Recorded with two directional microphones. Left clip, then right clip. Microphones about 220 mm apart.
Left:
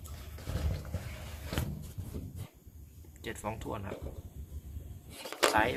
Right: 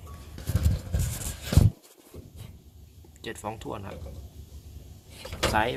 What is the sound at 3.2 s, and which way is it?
Speech, 25° right (ahead or behind).